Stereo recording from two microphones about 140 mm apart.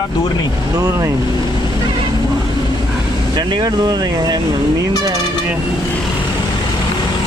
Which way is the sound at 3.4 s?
30° right (ahead or behind).